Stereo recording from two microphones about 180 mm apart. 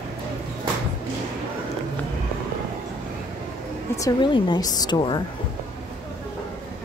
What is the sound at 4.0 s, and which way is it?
Speech, 25° left (ahead or behind).